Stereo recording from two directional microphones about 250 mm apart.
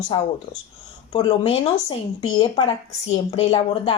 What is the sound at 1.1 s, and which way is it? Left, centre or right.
Speech, centre.